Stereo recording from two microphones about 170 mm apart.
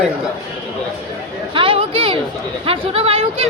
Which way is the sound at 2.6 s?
35° right (ahead or behind).